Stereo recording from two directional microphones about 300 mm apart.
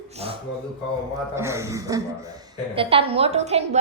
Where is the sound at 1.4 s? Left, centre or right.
Centre.